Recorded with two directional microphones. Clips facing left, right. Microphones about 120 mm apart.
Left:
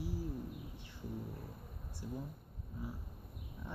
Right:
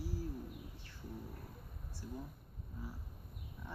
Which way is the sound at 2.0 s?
15° left (ahead or behind).